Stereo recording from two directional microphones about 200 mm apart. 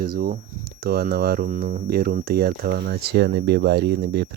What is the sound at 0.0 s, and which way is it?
Speech, 50° right (ahead or behind).